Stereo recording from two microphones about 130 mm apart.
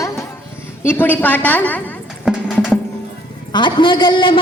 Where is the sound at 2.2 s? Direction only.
5° right (ahead or behind).